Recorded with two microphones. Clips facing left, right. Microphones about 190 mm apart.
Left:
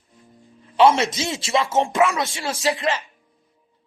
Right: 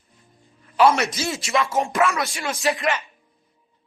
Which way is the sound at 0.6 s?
20° left (ahead or behind).